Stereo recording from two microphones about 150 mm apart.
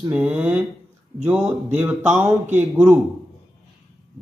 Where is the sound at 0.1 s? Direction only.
10° right (ahead or behind).